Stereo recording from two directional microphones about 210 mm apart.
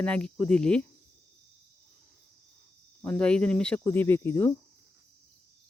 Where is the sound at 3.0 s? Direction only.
5° left (ahead or behind).